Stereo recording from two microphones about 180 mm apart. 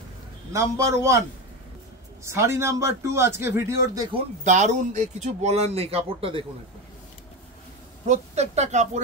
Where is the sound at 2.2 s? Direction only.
15° right (ahead or behind).